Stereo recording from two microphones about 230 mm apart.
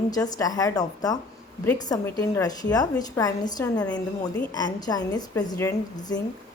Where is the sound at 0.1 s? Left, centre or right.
Centre.